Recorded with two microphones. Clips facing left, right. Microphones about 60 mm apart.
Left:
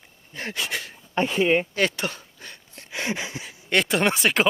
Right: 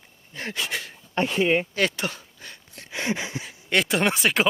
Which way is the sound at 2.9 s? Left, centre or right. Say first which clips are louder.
Right 1 dB; left.